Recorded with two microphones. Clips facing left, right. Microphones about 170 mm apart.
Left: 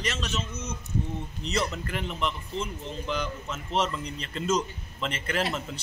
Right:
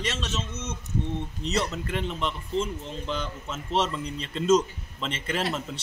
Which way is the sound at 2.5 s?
25° right (ahead or behind).